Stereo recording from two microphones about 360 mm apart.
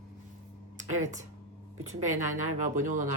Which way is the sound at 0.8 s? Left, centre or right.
Right.